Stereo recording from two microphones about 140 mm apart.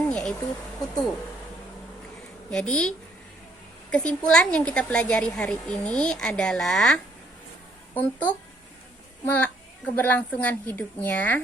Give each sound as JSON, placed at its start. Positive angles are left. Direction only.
{"t": 0.0, "sound": "a sound", "side_deg": 5}
{"t": 2.5, "sound": "speech", "side_deg": 5}
{"t": 3.9, "sound": "a woman's voice", "side_deg": 5}